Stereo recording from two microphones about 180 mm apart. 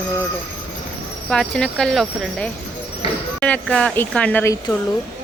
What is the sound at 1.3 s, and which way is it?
Speech, 5° left (ahead or behind).